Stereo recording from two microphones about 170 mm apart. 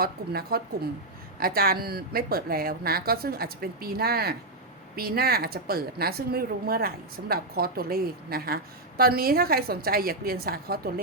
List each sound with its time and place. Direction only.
0.0 s a woman's voice: 65° right (ahead or behind)